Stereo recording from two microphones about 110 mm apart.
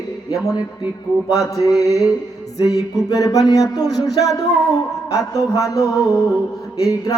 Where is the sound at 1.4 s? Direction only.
30° left (ahead or behind).